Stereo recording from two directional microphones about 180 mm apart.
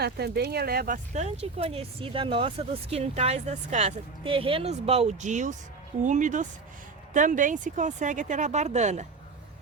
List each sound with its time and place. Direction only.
0.0 s speech: 60° right (ahead or behind)
1.1 s speech: 40° right (ahead or behind)